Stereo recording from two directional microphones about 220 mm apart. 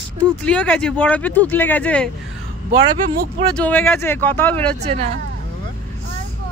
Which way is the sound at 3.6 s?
10° left (ahead or behind).